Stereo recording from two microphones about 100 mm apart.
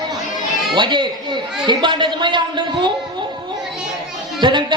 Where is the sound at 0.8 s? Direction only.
50° right (ahead or behind).